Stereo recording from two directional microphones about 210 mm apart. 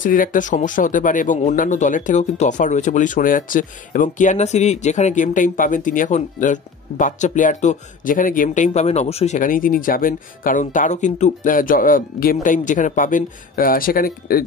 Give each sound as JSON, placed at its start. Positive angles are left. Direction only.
{"t": 0.0, "sound": "speech", "side_deg": 40}